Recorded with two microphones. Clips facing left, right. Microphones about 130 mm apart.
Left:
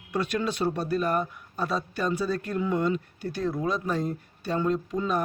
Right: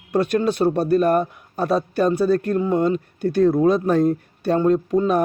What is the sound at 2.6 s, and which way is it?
Speech, 40° right (ahead or behind).